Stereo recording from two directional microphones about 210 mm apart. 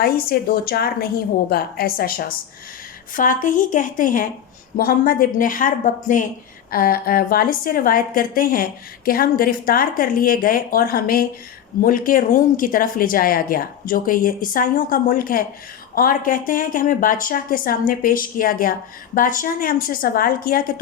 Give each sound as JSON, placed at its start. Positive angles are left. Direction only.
{"t": 0.0, "sound": "a woman's voice", "side_deg": 45}